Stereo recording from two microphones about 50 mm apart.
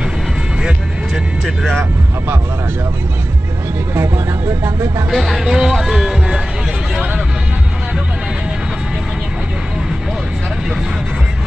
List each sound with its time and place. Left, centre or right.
1.1 s vehicle: centre
4.6 s speech: right
5.1 s speech: centre